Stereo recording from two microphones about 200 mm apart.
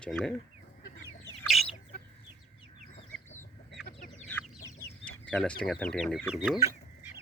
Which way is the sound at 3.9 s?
45° left (ahead or behind).